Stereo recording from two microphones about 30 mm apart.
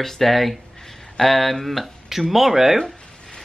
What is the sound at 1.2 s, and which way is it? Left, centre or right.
Speech, centre.